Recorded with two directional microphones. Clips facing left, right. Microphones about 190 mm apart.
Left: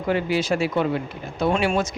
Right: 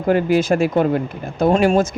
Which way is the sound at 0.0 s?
45° right (ahead or behind).